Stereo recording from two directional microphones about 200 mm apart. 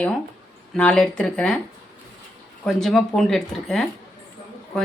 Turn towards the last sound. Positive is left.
turn(degrees=5)  # may be behind; listen again after turning